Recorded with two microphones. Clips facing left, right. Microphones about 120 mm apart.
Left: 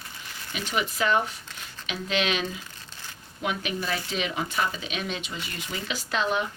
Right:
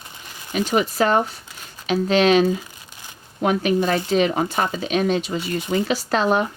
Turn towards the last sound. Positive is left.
turn(degrees=-45)  # may be behind; listen again after turning